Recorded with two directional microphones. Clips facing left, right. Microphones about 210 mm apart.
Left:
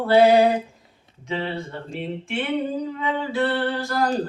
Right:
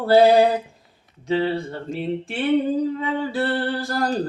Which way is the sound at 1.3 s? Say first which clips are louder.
Right 6 dB; 35° right (ahead or behind).